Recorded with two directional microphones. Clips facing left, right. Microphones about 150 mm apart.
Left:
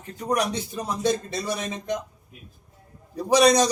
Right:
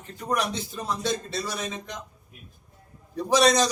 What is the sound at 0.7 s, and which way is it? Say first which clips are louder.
Speech: left 5 dB; 15° left (ahead or behind).